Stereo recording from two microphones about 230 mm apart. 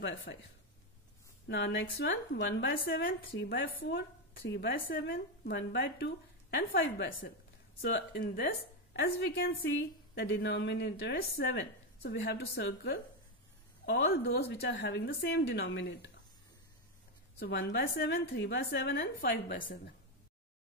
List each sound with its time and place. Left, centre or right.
0.0 s a woman's voice: left
1.5 s a woman's voice: left
7.9 s a woman's voice: left
17.4 s a woman's voice: left